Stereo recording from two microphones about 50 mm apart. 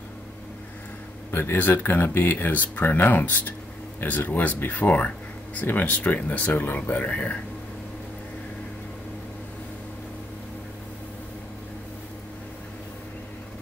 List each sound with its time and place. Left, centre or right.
1.3 s speech: left